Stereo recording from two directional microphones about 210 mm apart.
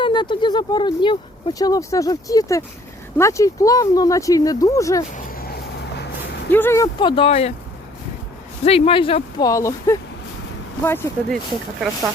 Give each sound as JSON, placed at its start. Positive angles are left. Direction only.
{"t": 0.0, "sound": "speech", "side_deg": 20}
{"t": 5.1, "sound": "a sound", "side_deg": 40}
{"t": 6.5, "sound": "speech", "side_deg": 10}
{"t": 8.6, "sound": "speech", "side_deg": 30}